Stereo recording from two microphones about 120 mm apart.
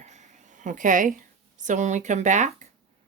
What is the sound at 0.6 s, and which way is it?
Speech, 90° right.